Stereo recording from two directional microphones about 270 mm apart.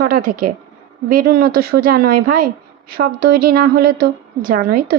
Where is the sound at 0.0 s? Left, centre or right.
Right.